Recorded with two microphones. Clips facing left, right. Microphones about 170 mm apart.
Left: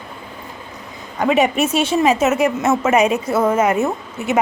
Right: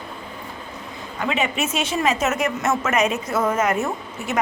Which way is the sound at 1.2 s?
45° left (ahead or behind).